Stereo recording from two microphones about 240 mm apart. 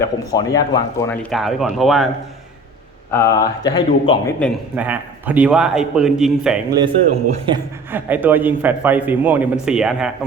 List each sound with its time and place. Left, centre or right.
0.0 s speech: centre
3.1 s speech: centre
4.7 s speech: centre
6.7 s a man's voice: centre